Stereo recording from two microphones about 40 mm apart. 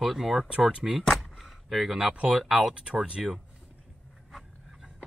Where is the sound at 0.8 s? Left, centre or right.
Right.